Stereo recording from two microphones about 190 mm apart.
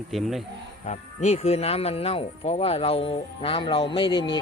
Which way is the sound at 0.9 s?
35° left (ahead or behind).